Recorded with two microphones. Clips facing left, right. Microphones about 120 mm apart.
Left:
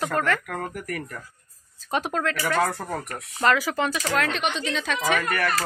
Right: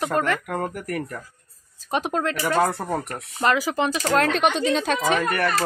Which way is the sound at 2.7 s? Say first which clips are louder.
Right 4 dB; 30° right (ahead or behind).